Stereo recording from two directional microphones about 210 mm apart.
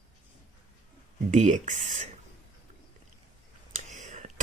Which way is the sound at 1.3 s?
35° right (ahead or behind).